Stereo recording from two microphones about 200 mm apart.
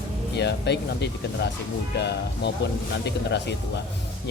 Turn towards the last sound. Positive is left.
turn(degrees=60)  # may be behind; listen again after turning